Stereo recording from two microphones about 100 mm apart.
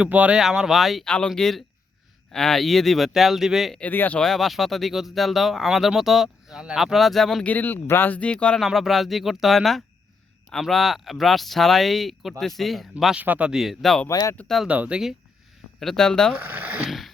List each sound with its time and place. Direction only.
0.0 s speech: 10° right (ahead or behind)
3.8 s speech: 15° left (ahead or behind)
4.2 s speech: centre (ahead or behind)
7.4 s speech: 15° left (ahead or behind); by 13.1 s centre (ahead or behind)
13.1 s speech: 15° right (ahead or behind)
14.1 s speech: 35° left (ahead or behind)
14.3 s speech: 5° left (ahead or behind)
14.7 s speech: 10° right (ahead or behind)
15.8 s speech: 5° left (ahead or behind)
16.5 s speech: 15° right (ahead or behind)